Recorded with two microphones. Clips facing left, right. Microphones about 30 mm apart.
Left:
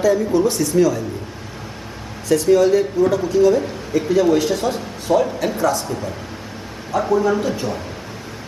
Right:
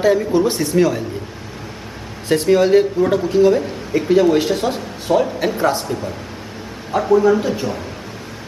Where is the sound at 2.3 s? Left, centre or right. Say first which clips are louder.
Right 1 dB; right; by 5.5 s centre.